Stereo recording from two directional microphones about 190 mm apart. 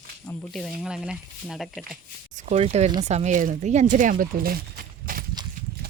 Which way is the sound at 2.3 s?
40° right (ahead or behind).